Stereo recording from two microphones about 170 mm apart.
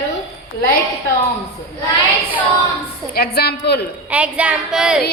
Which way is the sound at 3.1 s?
65° left (ahead or behind).